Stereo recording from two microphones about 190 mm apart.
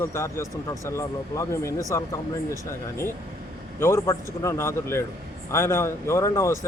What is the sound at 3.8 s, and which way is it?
Speech, 15° left (ahead or behind).